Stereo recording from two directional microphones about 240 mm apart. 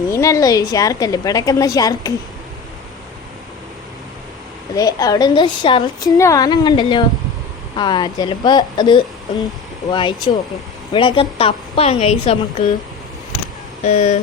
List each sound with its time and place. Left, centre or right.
0.1 s a woman's voice: centre
4.7 s a woman's voice: centre
13.8 s a woman's voice: left